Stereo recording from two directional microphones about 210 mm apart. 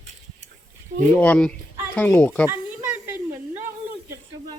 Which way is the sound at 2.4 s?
10° right (ahead or behind).